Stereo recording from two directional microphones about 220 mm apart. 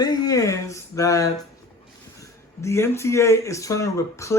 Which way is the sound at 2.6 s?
10° left (ahead or behind).